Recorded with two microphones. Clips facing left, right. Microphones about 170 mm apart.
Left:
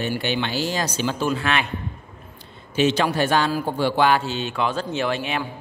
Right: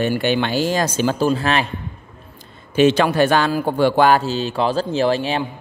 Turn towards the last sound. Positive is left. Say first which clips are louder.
# right 6 dB
turn(degrees=-35)  # may be behind; listen again after turning